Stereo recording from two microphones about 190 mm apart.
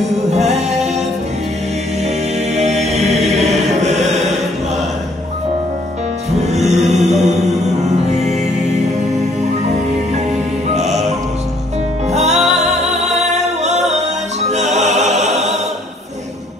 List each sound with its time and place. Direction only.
0.3 s music: 35° right (ahead or behind)
2.5 s chant: 35° right (ahead or behind)
6.4 s music: 35° right (ahead or behind)
10.7 s music: 35° right (ahead or behind)
12.1 s music: 35° right (ahead or behind)